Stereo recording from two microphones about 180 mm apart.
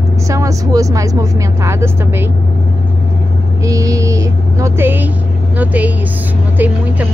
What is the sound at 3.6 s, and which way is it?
Speech, 20° right (ahead or behind).